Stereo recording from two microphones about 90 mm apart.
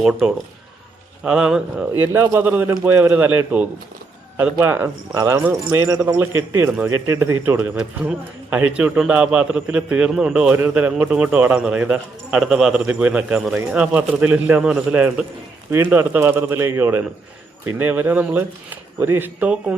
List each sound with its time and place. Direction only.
0.0 s a man's voice: 5° right (ahead or behind)
1.9 s speech: 25° right (ahead or behind)
5.1 s a man's voice: 40° right (ahead or behind); by 15.2 s 15° right (ahead or behind)
15.7 s speech: 25° right (ahead or behind)